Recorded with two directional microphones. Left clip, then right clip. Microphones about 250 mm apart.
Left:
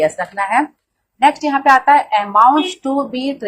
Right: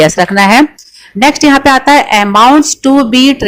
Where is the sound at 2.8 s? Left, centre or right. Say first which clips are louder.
Right 10 dB; right.